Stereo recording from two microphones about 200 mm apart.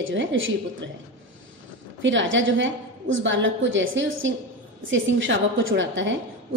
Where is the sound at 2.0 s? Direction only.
65° right (ahead or behind).